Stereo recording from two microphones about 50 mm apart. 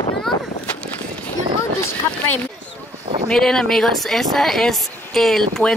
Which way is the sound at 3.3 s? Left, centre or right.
Centre.